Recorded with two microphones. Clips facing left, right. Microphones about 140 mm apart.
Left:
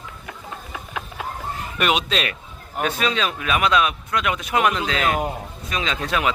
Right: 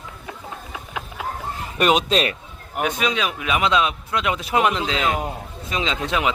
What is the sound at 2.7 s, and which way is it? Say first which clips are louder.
A man's voice: even; 10° right (ahead or behind).